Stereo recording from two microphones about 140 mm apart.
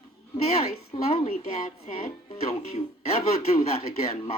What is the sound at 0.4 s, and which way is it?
Speech, 45° left (ahead or behind).